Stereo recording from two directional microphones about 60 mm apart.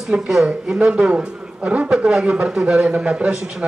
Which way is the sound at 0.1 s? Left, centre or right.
Centre.